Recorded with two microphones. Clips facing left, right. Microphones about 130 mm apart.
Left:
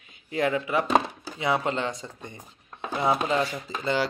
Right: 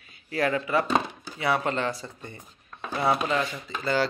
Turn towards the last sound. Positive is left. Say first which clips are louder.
# right 1 dB
turn(degrees=20)  # may be behind; listen again after turning